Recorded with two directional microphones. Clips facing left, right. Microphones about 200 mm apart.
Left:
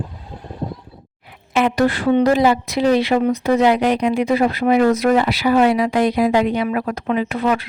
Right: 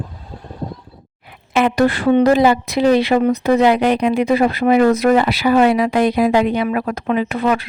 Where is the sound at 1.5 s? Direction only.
65° right (ahead or behind).